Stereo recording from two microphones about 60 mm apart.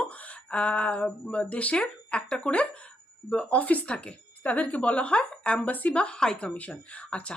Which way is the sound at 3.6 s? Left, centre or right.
Left.